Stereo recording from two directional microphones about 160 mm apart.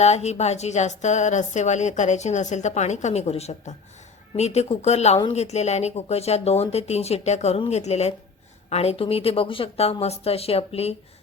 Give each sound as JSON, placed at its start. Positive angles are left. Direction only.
{"t": 0.0, "sound": "a woman's voice", "side_deg": 45}